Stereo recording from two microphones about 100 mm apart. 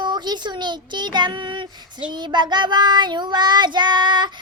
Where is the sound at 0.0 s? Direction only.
45° right (ahead or behind).